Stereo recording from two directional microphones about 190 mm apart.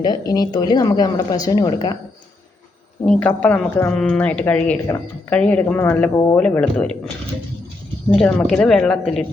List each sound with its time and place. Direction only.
0.0 s speech: 20° left (ahead or behind)
3.1 s speech: 5° left (ahead or behind)
8.1 s speech: 5° left (ahead or behind)